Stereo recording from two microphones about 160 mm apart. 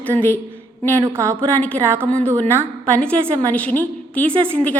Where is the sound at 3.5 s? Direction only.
10° left (ahead or behind).